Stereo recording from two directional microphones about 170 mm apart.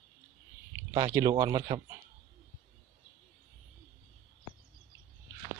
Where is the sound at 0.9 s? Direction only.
20° right (ahead or behind).